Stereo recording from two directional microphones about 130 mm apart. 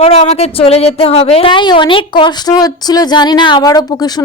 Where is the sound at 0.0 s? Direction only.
55° left (ahead or behind).